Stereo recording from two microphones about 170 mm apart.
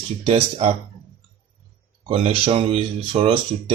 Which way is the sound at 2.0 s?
35° right (ahead or behind).